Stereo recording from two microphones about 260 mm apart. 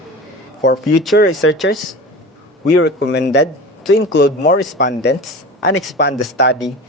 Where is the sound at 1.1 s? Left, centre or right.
Left.